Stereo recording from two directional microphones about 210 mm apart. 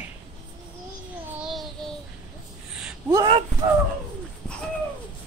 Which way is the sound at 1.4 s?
Centre (ahead or behind).